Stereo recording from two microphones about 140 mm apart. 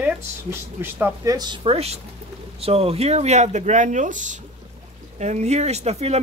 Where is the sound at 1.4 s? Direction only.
35° right (ahead or behind).